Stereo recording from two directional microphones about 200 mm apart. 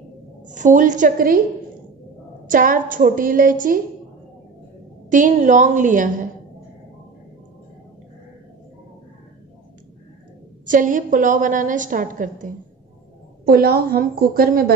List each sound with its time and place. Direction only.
0.5 s a woman's voice: 40° right (ahead or behind)
2.4 s a woman's voice: 45° right (ahead or behind)
5.1 s a woman's voice: 40° right (ahead or behind)
10.6 s a woman's voice: 40° right (ahead or behind)